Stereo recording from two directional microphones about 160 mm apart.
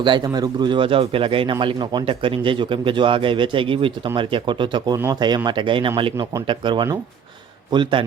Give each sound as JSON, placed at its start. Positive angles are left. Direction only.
{"t": 0.0, "sound": "speech", "side_deg": -30}